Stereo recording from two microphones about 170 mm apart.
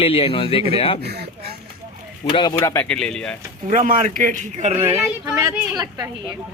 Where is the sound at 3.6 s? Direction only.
50° right (ahead or behind).